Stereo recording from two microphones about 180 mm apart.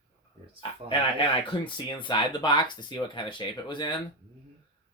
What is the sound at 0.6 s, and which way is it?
Speech, 30° left (ahead or behind).